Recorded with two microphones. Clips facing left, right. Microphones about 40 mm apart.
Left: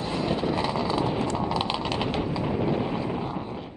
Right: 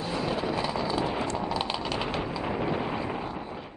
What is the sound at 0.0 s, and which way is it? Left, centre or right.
Vehicle, centre.